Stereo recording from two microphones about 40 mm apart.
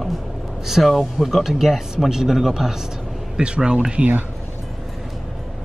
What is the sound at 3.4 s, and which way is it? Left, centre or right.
Speech, right.